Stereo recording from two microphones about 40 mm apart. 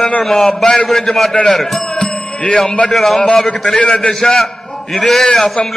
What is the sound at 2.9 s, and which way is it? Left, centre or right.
A man's voice, centre.